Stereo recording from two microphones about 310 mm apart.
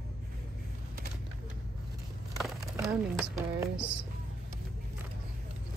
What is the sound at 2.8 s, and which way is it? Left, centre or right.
Speech, centre.